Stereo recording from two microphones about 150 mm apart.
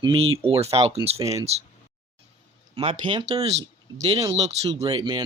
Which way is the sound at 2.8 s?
35° right (ahead or behind).